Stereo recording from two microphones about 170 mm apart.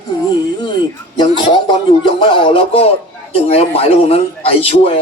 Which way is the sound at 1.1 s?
25° left (ahead or behind).